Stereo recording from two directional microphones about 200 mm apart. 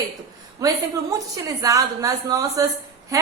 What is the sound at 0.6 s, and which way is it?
A woman's voice, 15° right (ahead or behind).